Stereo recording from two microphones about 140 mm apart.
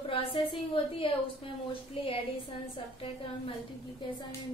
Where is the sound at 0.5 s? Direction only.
40° left (ahead or behind).